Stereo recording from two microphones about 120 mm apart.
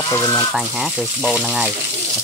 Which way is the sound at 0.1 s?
30° left (ahead or behind).